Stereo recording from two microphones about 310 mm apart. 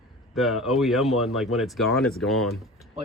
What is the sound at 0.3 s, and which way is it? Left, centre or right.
Speech, centre.